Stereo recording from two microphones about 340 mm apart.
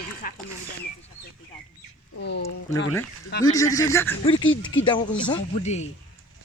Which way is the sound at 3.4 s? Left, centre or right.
Centre.